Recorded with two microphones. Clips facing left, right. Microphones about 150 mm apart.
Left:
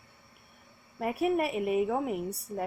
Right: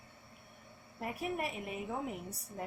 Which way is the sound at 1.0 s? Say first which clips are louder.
Left 10 dB; 70° left (ahead or behind).